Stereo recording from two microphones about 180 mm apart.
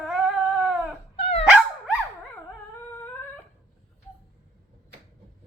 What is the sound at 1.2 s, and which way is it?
Dog, 35° left (ahead or behind).